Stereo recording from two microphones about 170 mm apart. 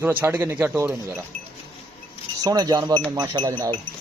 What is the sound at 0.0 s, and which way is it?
Speech, 10° right (ahead or behind).